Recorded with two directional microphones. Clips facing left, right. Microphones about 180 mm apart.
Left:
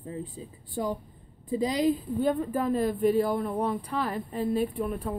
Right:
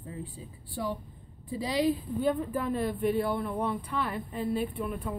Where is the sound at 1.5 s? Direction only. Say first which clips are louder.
Left 3 dB; 45° left (ahead or behind).